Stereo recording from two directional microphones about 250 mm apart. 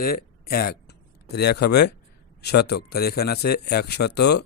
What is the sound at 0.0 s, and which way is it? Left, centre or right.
A man's voice, left.